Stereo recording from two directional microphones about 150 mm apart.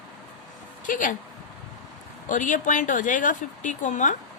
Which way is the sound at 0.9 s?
60° left (ahead or behind).